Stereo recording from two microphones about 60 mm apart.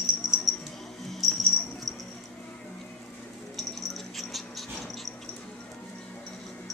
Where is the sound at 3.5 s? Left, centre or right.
Centre.